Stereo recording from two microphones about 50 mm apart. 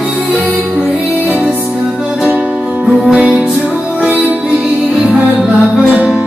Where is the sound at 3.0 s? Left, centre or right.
Centre.